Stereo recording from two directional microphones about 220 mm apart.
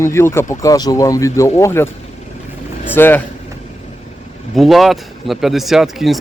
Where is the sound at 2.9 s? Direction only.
10° left (ahead or behind).